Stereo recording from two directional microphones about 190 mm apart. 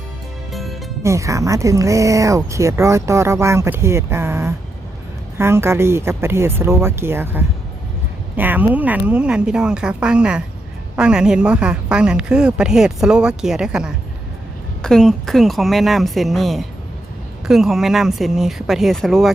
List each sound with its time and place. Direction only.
0.5 s music: centre (ahead or behind)
1.0 s a woman's voice: 15° right (ahead or behind); by 19.3 s centre (ahead or behind)